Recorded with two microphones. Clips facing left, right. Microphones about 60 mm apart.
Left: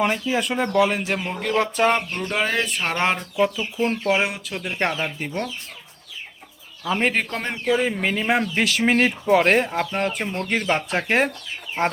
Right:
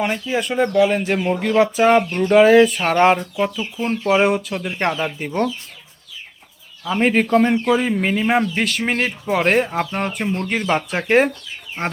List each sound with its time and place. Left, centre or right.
0.0 s speech: centre
2.0 s speech: right
2.3 s speech: centre
6.8 s speech: centre